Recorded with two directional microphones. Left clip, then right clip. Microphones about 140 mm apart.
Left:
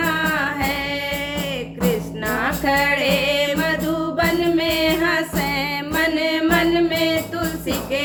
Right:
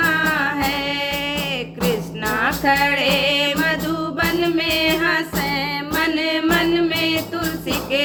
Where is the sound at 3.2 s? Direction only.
25° right (ahead or behind).